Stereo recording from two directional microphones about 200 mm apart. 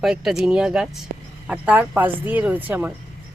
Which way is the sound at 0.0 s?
Centre (ahead or behind).